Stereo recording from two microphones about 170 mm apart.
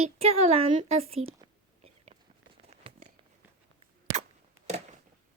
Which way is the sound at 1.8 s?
40° right (ahead or behind).